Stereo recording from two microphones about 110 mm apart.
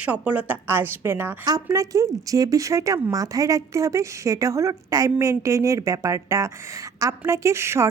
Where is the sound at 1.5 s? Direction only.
30° right (ahead or behind).